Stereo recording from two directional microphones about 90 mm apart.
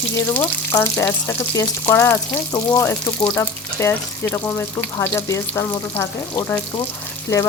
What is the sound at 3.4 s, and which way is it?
Speech, 25° left (ahead or behind).